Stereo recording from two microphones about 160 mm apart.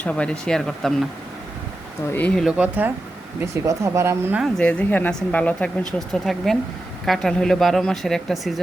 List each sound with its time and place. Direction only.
0.0 s speech: 5° left (ahead or behind)
2.1 s speech: 5° left (ahead or behind)
2.5 s speech: 10° right (ahead or behind)
4.4 s speech: centre (ahead or behind)